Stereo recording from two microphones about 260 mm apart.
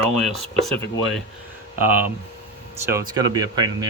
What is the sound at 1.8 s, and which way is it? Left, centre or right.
Speech, centre.